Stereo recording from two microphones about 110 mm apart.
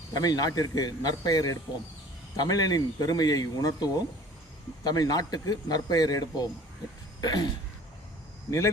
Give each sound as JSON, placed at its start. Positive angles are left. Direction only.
{"t": 0.1, "sound": "a man's voice", "side_deg": 35}
{"t": 7.2, "sound": "a sound", "side_deg": 35}
{"t": 8.4, "sound": "speech", "side_deg": 25}